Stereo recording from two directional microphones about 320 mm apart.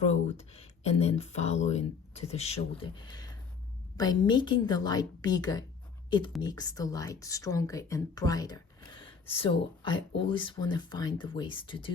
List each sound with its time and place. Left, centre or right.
0.1 s a woman's voice: centre